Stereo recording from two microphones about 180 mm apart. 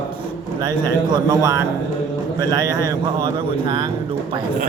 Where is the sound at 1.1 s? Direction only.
20° right (ahead or behind).